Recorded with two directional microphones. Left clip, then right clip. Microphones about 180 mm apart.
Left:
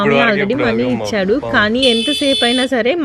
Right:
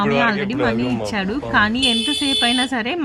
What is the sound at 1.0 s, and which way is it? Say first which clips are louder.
Speech: left 7 dB; 15° left (ahead or behind).